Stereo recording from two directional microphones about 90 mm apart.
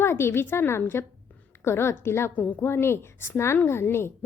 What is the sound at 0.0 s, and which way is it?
A woman's voice, 30° left (ahead or behind).